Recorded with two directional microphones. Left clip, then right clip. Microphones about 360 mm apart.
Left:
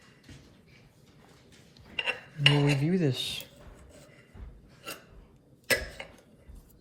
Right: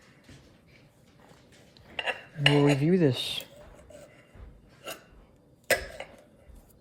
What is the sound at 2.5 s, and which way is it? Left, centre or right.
Cutlery, right.